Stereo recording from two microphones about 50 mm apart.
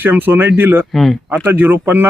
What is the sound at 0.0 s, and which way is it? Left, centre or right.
A man's voice, right.